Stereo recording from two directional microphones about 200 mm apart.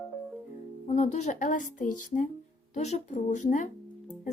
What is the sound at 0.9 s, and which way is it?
A woman's voice, 35° left (ahead or behind).